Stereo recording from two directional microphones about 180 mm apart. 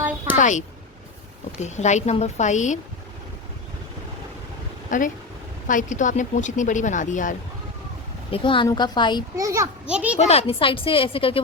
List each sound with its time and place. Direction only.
0.3 s a woman's voice: 40° left (ahead or behind)
4.9 s speech: 45° left (ahead or behind)
8.3 s a woman's voice: 30° left (ahead or behind)
9.3 s a child's voice: 15° right (ahead or behind)
10.2 s a woman's voice: 35° left (ahead or behind)